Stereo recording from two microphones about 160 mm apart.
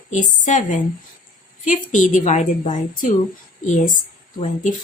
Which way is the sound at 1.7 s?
50° left (ahead or behind).